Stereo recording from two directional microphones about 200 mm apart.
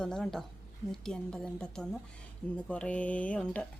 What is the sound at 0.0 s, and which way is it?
A woman's voice, 5° left (ahead or behind).